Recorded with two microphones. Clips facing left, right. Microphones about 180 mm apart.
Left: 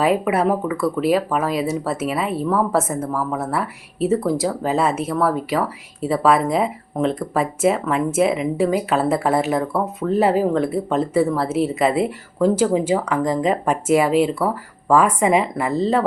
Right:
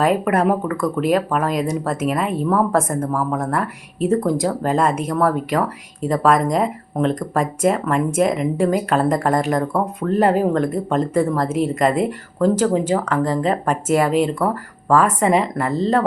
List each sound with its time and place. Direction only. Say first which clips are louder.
0.0 s speech: right 1 dB; 5° left (ahead or behind)